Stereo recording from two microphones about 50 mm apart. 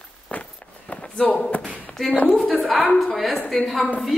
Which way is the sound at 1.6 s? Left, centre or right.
Left.